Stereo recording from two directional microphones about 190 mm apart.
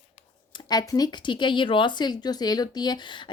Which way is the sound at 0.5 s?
20° left (ahead or behind).